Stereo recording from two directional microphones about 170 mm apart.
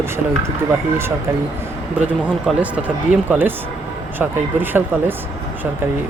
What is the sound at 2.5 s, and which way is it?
Speech, 5° right (ahead or behind).